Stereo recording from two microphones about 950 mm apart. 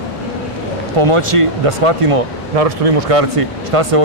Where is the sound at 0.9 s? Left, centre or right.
Right.